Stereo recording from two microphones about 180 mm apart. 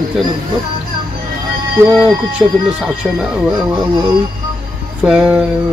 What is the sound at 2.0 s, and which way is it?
Speech, 5° right (ahead or behind).